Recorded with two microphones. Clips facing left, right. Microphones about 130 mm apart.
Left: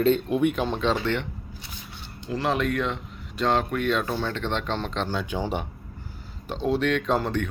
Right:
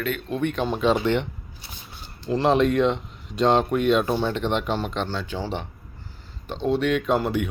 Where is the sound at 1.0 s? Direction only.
20° right (ahead or behind).